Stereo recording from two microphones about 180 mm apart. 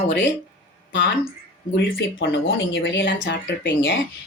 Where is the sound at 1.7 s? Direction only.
90° left.